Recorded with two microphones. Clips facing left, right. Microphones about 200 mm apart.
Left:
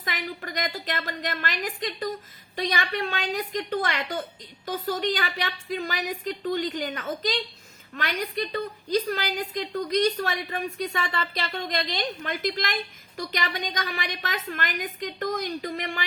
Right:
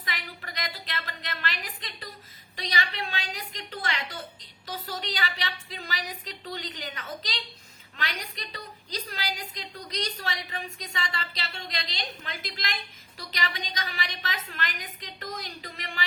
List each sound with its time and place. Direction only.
0.0 s a woman's voice: 45° left (ahead or behind)